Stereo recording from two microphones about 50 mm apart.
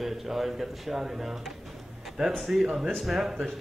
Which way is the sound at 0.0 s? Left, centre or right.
Centre.